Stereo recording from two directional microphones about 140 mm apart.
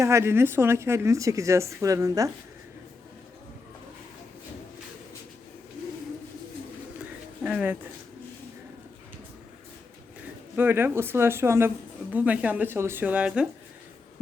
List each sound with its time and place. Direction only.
0.0 s a woman's voice: 20° right (ahead or behind)
7.0 s bird: 10° right (ahead or behind)
10.5 s speech: 15° right (ahead or behind)